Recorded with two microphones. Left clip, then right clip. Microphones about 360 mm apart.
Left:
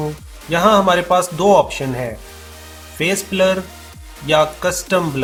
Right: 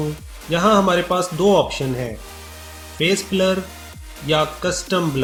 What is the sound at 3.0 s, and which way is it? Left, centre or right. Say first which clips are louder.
Speech: left 2 dB; left.